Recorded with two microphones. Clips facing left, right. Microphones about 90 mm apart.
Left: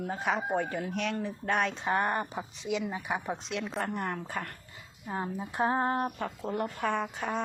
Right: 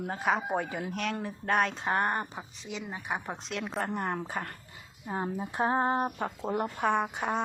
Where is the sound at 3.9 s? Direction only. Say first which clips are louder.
Right 2 dB; 25° right (ahead or behind).